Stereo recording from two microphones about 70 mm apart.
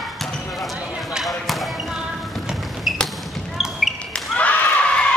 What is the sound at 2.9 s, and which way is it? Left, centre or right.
Basketball bounce, centre.